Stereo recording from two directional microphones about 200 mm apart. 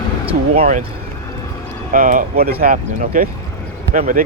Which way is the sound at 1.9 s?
40° right (ahead or behind).